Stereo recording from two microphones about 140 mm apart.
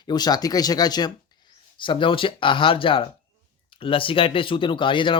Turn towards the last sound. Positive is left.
turn(degrees=35)  # may be behind; listen again after turning